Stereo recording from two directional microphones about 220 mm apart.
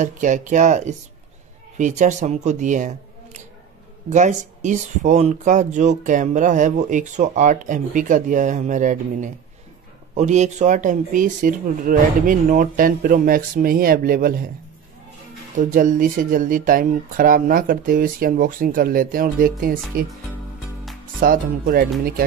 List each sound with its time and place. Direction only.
0.0 s speech: 35° right (ahead or behind)
15.5 s speech: 35° right (ahead or behind)
21.2 s speech: 40° right (ahead or behind)